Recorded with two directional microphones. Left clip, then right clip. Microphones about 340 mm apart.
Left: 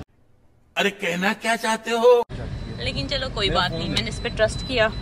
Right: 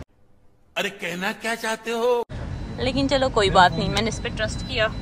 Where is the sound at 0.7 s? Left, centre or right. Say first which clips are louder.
Left 4 dB; centre.